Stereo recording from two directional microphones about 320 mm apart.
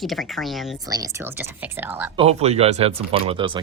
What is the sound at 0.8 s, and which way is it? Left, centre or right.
Speech, centre.